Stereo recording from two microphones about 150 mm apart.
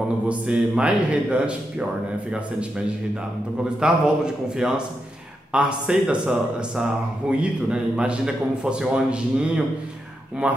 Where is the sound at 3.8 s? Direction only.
5° right (ahead or behind).